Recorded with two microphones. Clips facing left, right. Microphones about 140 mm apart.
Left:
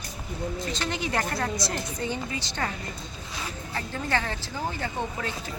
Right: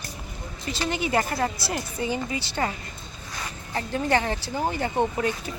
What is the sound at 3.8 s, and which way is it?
Speech, 20° right (ahead or behind).